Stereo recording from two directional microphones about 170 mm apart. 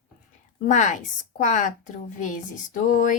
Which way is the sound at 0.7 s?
45° left (ahead or behind).